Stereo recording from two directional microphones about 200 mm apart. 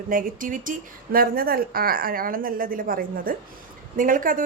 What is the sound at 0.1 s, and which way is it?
A woman's voice, 45° right (ahead or behind).